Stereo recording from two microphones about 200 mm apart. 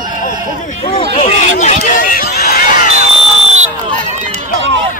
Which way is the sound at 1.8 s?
45° left (ahead or behind).